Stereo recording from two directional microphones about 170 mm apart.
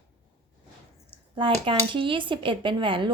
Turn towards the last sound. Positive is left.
turn(degrees=-30)  # may be behind; listen again after turning